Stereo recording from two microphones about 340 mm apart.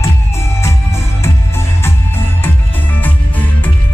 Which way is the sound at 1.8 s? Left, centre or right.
Centre.